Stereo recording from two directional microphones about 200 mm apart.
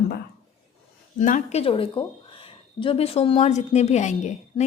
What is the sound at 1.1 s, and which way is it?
A woman's voice, 40° left (ahead or behind).